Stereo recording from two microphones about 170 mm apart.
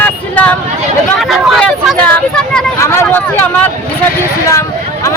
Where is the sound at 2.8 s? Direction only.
15° left (ahead or behind).